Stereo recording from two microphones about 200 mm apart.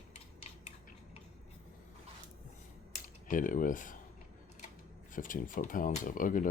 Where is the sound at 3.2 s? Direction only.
40° left (ahead or behind).